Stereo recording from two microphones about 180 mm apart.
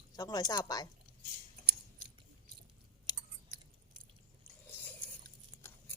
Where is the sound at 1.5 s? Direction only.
55° right (ahead or behind).